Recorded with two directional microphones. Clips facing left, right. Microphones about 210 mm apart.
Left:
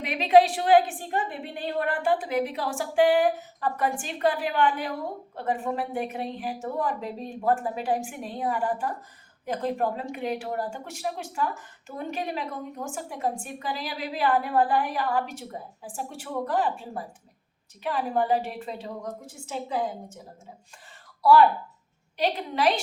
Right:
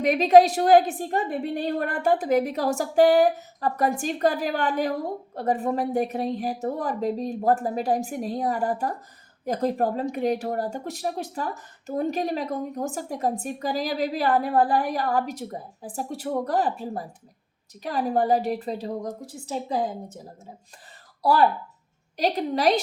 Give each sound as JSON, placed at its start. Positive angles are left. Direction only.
{"t": 0.0, "sound": "a woman's voice", "side_deg": -40}
{"t": 21.2, "sound": "a woman's voice", "side_deg": -35}